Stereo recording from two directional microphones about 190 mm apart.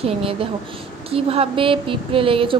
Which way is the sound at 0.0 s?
30° right (ahead or behind).